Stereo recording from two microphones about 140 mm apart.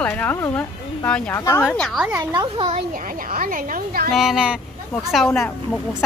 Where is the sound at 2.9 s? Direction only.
75° right (ahead or behind).